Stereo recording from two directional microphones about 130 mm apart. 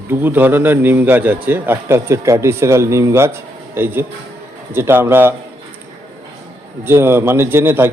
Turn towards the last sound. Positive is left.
turn(degrees=-15)  # may be behind; listen again after turning